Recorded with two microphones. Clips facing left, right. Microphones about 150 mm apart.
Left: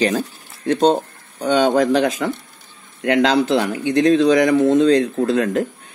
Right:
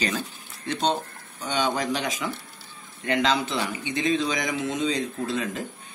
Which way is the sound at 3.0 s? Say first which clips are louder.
Left 8 dB; 65° left (ahead or behind).